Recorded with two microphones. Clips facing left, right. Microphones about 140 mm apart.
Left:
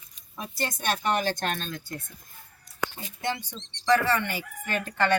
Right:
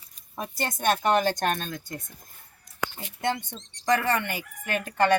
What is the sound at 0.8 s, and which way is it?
Speech, 50° right (ahead or behind).